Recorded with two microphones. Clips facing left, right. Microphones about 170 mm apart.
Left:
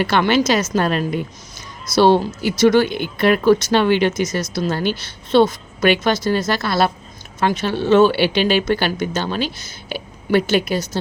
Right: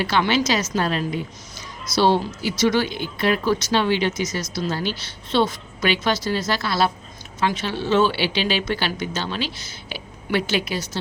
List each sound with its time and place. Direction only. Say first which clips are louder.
0.0 s speech: left 4 dB; 55° left (ahead or behind)